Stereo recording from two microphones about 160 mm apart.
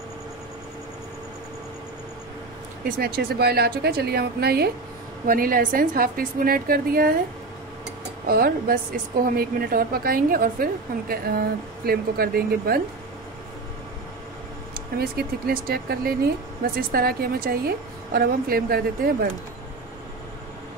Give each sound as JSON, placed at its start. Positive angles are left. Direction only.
{"t": 3.0, "sound": "a woman's voice", "side_deg": -70}
{"t": 5.2, "sound": "a woman's voice", "side_deg": -60}
{"t": 8.3, "sound": "a woman's voice", "side_deg": -70}
{"t": 15.0, "sound": "a woman's voice", "side_deg": -75}